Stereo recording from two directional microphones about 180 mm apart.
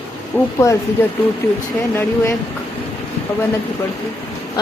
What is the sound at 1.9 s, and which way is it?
Speech, 15° left (ahead or behind).